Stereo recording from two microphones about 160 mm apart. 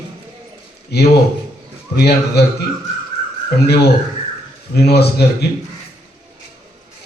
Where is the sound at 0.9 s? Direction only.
90° left.